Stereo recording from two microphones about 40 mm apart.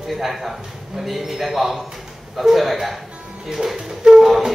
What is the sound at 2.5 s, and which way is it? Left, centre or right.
Speech, centre.